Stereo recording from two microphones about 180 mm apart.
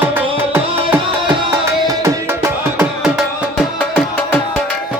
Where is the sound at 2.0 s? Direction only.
15° right (ahead or behind).